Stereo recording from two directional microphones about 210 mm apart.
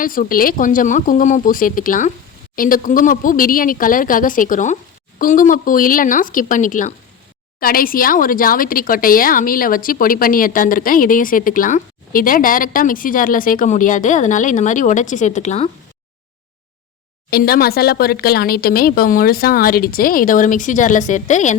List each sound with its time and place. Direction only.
0.0 s speech: 40° left (ahead or behind)
17.3 s speech: 45° left (ahead or behind)